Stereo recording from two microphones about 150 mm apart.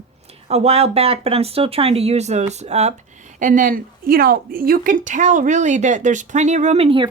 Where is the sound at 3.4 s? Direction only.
60° right (ahead or behind).